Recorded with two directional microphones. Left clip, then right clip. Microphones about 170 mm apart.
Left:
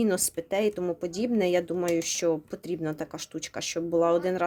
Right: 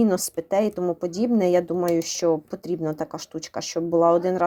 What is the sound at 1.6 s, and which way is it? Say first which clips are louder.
Speech: right 5 dB; 20° left (ahead or behind).